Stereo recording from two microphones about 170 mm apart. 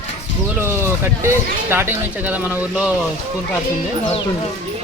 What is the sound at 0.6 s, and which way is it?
Speech, 15° right (ahead or behind).